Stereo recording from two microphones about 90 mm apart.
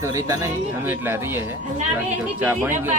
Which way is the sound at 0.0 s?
35° right (ahead or behind).